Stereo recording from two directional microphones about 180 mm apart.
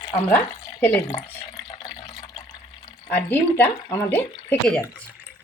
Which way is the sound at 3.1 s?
10° left (ahead or behind).